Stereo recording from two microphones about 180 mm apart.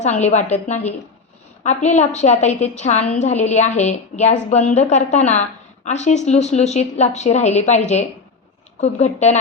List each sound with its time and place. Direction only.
0.0 s a woman's voice: 40° left (ahead or behind)